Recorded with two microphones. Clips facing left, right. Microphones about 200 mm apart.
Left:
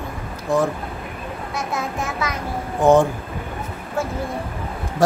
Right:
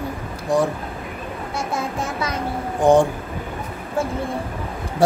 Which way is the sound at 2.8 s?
15° right (ahead or behind).